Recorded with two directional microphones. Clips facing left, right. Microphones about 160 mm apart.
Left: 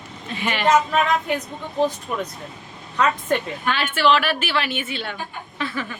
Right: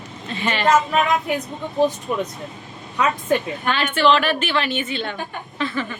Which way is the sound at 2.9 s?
10° right (ahead or behind).